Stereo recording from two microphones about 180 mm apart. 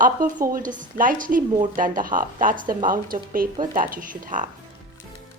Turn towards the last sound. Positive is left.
turn(degrees=-45)  # may be behind; listen again after turning